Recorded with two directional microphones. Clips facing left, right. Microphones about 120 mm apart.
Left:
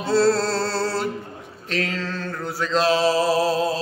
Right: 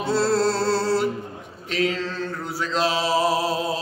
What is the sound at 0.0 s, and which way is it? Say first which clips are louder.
Music: left 2 dB; 15° right (ahead or behind).